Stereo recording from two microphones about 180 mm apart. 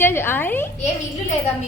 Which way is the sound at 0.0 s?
15° left (ahead or behind).